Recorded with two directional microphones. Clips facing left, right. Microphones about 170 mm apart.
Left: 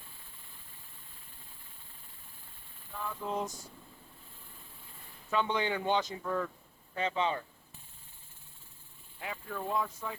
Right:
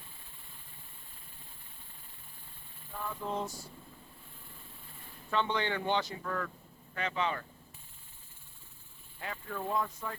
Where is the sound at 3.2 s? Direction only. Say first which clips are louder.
Left 1 dB; 15° left (ahead or behind).